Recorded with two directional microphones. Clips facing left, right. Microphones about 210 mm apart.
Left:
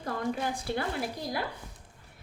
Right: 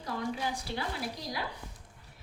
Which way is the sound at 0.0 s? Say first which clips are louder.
Left 3 dB; 50° left (ahead or behind).